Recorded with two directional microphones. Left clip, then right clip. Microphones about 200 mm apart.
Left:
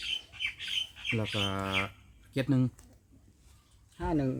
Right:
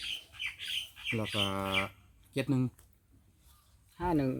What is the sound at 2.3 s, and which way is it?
Speech, 5° left (ahead or behind).